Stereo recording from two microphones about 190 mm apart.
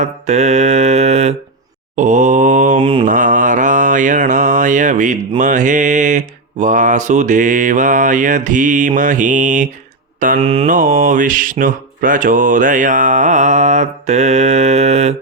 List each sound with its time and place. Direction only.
0.0 s mantra: 35° right (ahead or behind)
10.3 s mantra: 30° right (ahead or behind)
10.7 s mantra: 45° right (ahead or behind)